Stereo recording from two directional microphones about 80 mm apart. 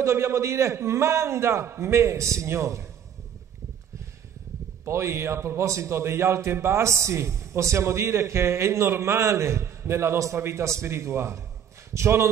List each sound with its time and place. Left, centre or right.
0.0 s a man's voice: right
4.8 s a man's voice: right